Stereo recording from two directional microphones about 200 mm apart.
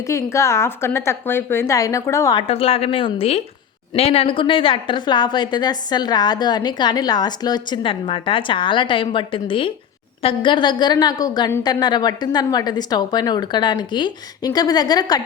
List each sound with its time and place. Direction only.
0.1 s a woman's voice: 15° left (ahead or behind)
2.5 s a woman's voice: 30° left (ahead or behind)